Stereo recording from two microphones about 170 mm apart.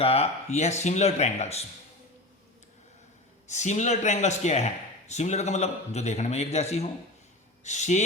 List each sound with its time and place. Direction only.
0.0 s a man's voice: 35° left (ahead or behind)
3.5 s a man's voice: 45° left (ahead or behind)